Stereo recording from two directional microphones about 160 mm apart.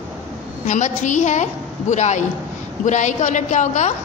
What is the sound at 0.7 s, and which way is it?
A woman's voice, 50° left (ahead or behind).